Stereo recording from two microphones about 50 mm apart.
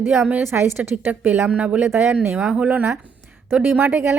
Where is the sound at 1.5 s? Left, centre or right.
Right.